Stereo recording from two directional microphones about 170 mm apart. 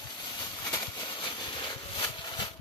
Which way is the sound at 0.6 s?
25° left (ahead or behind).